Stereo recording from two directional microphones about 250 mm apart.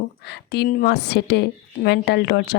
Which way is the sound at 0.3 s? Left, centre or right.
Left.